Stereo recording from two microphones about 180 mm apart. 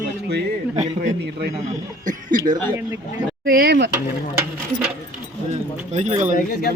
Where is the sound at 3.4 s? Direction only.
55° right (ahead or behind).